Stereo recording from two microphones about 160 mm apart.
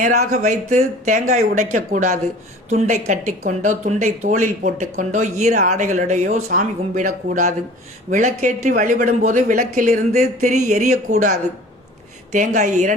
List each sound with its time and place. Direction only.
0.0 s speech: 50° right (ahead or behind)
8.7 s speech: 60° right (ahead or behind)
10.1 s speech: 45° right (ahead or behind)